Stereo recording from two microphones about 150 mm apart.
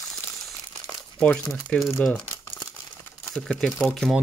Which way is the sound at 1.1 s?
5° left (ahead or behind).